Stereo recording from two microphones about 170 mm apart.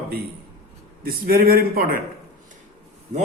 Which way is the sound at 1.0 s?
60° right (ahead or behind).